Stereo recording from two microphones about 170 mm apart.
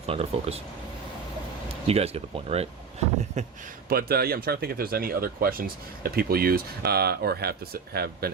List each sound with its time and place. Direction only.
0.0 s speech: 35° right (ahead or behind)
1.9 s speech: 35° right (ahead or behind)
3.8 s speech: 65° right (ahead or behind)